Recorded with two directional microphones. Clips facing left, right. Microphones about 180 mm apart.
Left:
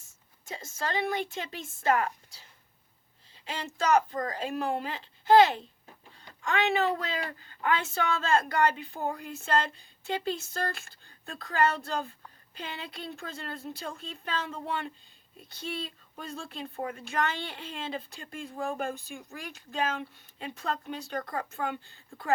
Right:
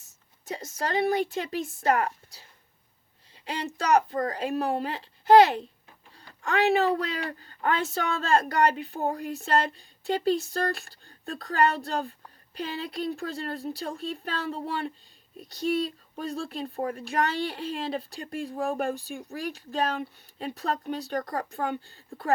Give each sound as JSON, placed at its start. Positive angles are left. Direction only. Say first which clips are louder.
{"t": 0.4, "sound": "speech", "louder": "right 3 dB", "side_deg": -35}
{"t": 3.5, "sound": "speech", "louder": "right 2 dB", "side_deg": -35}